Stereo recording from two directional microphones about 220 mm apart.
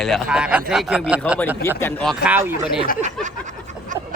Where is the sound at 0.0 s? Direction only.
Centre (ahead or behind).